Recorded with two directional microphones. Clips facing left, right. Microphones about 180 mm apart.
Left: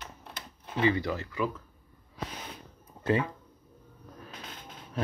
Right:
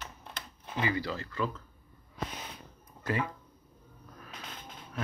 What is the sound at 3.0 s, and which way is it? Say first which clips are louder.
Speech: left 5 dB; 25° left (ahead or behind).